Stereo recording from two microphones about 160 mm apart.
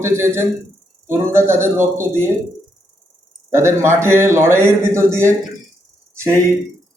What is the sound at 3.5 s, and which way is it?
Speech, 15° right (ahead or behind).